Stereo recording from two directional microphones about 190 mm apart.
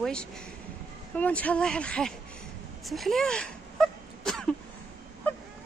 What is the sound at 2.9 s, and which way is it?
Wail, centre (ahead or behind).